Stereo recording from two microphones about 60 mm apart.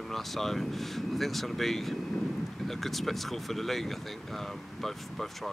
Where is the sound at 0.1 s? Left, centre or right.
Centre.